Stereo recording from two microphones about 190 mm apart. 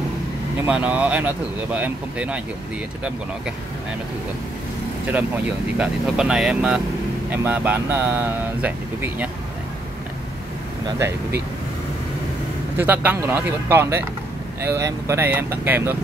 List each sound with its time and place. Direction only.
0.7 s speech: 10° right (ahead or behind)
5.8 s speech: 5° right (ahead or behind)
12.7 s speech: 10° right (ahead or behind)